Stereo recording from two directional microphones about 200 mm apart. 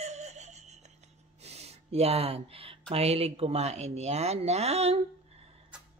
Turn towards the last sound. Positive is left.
turn(degrees=-30)  # may be behind; listen again after turning